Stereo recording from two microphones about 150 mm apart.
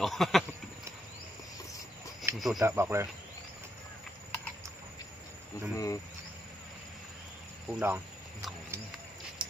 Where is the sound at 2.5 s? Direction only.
15° right (ahead or behind).